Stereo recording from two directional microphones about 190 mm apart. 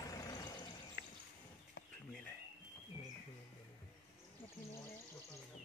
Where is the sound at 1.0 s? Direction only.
60° left (ahead or behind).